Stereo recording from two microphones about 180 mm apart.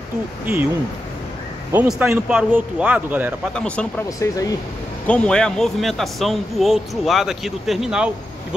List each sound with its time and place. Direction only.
1.7 s speech: 10° right (ahead or behind)
3.5 s speech: 5° left (ahead or behind)
4.2 s speech: 20° left (ahead or behind)
5.0 s a man's voice: 5° left (ahead or behind)